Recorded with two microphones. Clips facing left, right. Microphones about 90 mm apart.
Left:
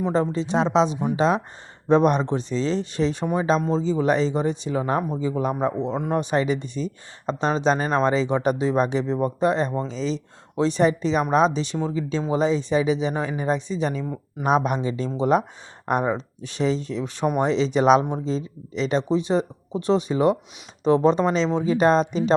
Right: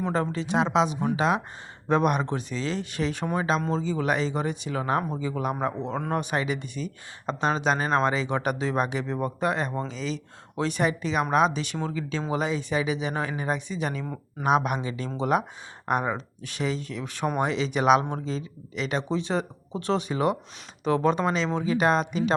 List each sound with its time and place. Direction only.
0.0 s speech: 25° left (ahead or behind)
4.9 s a man's voice: 10° left (ahead or behind)
5.2 s speech: 30° left (ahead or behind)
14.0 s speech: 10° left (ahead or behind)
14.4 s speech: 30° left (ahead or behind)